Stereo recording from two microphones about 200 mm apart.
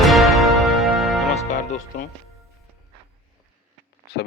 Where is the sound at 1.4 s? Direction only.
40° left (ahead or behind).